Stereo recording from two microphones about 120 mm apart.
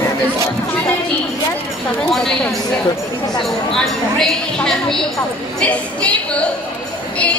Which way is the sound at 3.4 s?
5° left (ahead or behind).